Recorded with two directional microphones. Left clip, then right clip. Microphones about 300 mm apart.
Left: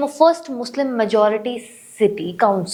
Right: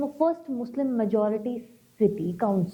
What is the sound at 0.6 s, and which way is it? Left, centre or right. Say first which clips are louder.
A woman's voice: left 7 dB; centre.